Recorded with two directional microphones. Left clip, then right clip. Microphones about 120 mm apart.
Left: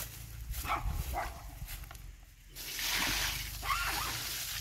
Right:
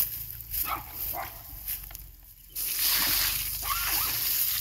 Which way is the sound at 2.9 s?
40° right (ahead or behind).